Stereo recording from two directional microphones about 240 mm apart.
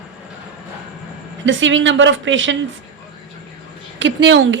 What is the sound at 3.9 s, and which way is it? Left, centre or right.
Speech, right.